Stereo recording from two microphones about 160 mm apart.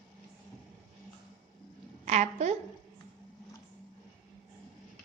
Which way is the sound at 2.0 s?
45° right (ahead or behind).